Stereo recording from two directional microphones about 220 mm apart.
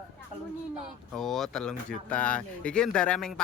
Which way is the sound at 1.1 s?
Centre (ahead or behind).